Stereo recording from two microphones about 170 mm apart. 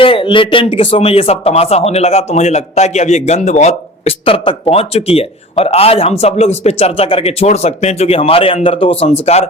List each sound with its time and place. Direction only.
0.0 s speech: 30° left (ahead or behind)